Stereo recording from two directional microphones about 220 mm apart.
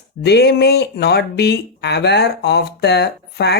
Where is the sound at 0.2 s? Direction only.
50° left (ahead or behind).